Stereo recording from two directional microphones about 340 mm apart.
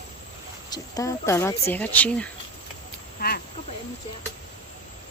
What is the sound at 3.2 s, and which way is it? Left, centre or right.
Speech, left.